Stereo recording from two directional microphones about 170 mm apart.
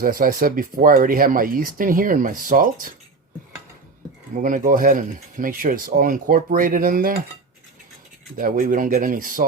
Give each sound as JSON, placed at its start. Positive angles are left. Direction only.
{"t": 0.0, "sound": "speech", "side_deg": -55}
{"t": 4.4, "sound": "speech", "side_deg": -50}
{"t": 8.4, "sound": "speech", "side_deg": -55}